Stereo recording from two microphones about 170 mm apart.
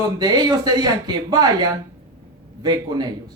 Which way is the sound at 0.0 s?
25° right (ahead or behind).